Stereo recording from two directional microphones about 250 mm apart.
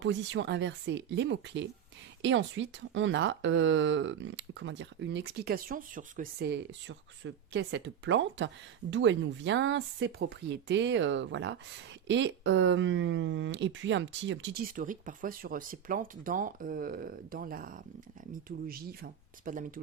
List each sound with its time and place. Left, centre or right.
0.0 s speech: right